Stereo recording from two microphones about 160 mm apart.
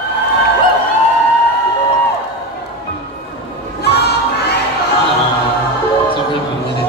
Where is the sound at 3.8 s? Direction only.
90° left.